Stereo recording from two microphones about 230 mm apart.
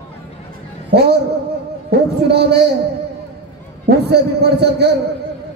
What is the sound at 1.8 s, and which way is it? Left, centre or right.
Speech, right.